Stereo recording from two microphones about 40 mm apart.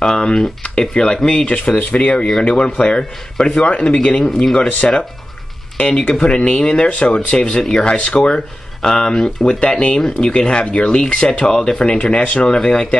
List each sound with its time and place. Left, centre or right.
0.0 s speech: centre
1.4 s speech: left
2.5 s speech: left
3.6 s speech: left
4.2 s speech: centre
6.9 s speech: left
8.8 s speech: centre
12.2 s speech: left
12.4 s speech: centre